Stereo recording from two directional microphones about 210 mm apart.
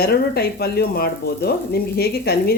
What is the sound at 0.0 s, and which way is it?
Frying, 50° left (ahead or behind).